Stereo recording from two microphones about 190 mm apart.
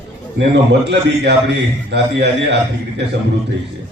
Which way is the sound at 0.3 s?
65° right (ahead or behind).